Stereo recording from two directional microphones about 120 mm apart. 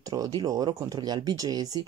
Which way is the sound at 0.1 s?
30° right (ahead or behind).